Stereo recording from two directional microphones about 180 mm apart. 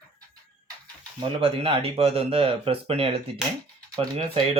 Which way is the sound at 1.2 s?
30° right (ahead or behind).